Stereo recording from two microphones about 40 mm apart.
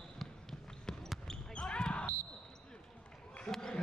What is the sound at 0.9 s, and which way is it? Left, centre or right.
Basketball bounce, centre.